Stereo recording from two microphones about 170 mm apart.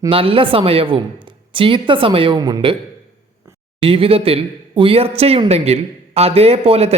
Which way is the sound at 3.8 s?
35° right (ahead or behind).